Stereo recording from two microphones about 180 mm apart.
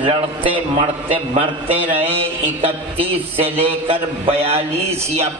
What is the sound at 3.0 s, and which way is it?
A man's voice, 30° right (ahead or behind).